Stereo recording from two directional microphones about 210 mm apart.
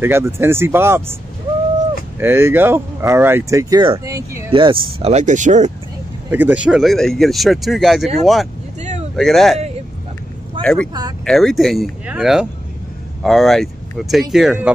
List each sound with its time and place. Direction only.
0.0 s speech: 10° right (ahead or behind)
2.1 s speech: 10° right (ahead or behind)
4.5 s speech: 25° right (ahead or behind)
6.3 s speech: 5° right (ahead or behind)
10.6 s speech: 5° left (ahead or behind)
10.9 s speech: 20° right (ahead or behind)
11.2 s speech: centre (ahead or behind)